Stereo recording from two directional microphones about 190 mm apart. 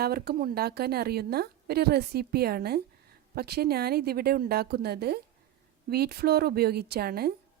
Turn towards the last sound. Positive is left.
turn(degrees=-55)  # may be behind; listen again after turning